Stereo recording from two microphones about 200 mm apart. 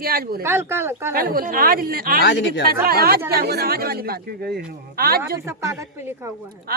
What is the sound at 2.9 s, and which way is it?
Speech, 50° right (ahead or behind).